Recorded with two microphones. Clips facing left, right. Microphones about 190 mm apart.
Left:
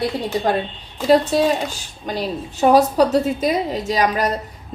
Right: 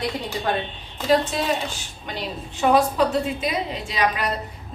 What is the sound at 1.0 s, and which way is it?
A woman's voice, 35° left (ahead or behind).